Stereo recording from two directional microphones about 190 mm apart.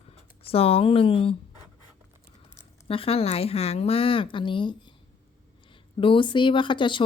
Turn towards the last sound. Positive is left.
turn(degrees=25)  # may be behind; listen again after turning